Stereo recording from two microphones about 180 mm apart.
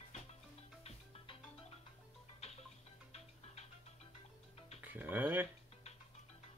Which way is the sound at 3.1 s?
35° left (ahead or behind).